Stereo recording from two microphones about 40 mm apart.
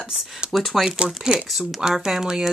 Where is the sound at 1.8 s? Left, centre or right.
Centre.